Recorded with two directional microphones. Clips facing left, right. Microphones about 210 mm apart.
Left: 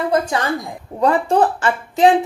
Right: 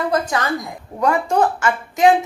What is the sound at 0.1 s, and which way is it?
A woman's voice, 30° left (ahead or behind).